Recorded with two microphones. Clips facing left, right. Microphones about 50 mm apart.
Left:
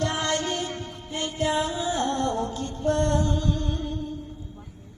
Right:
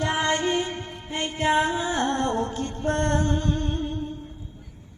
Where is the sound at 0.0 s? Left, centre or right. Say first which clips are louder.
Right 2 dB; centre.